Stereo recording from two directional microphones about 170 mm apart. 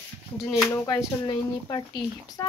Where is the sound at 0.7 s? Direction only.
25° left (ahead or behind).